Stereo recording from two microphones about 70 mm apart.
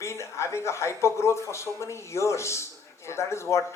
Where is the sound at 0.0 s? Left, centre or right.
Left.